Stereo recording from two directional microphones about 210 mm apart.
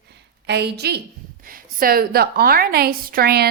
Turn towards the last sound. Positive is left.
turn(degrees=-50)  # may be behind; listen again after turning